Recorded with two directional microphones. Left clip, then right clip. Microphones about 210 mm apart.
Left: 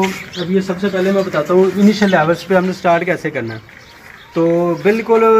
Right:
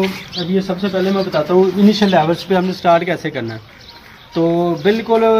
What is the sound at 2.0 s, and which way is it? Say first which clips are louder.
Speech: left 1 dB; 5° right (ahead or behind).